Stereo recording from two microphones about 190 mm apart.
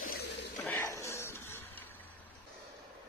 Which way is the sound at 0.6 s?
10° left (ahead or behind).